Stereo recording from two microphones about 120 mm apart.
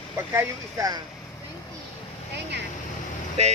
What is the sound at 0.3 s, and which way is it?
Speech, 30° right (ahead or behind).